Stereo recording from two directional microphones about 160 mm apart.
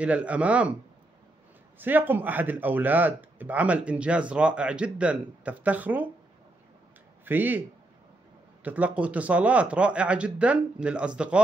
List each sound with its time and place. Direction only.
0.0 s speech: 10° right (ahead or behind)
1.8 s speech: 10° right (ahead or behind)
7.2 s speech: 10° right (ahead or behind)
8.6 s speech: 10° right (ahead or behind)